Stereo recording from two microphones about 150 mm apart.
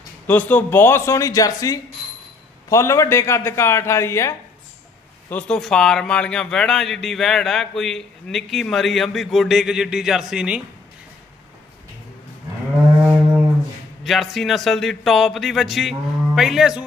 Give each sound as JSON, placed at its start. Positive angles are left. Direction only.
{"t": 0.3, "sound": "a man's voice", "side_deg": 10}
{"t": 5.3, "sound": "speech", "side_deg": 10}
{"t": 14.0, "sound": "speech", "side_deg": 0}